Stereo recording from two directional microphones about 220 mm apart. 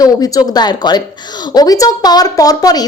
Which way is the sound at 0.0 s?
15° left (ahead or behind).